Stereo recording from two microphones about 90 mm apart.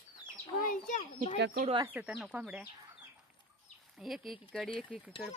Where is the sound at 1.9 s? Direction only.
10° right (ahead or behind).